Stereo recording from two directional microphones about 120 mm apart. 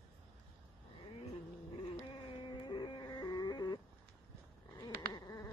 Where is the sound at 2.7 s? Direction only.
35° left (ahead or behind).